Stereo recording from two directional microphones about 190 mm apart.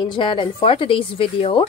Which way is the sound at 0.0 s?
25° left (ahead or behind).